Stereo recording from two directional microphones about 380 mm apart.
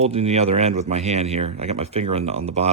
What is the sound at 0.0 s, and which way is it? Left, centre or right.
Speech, centre.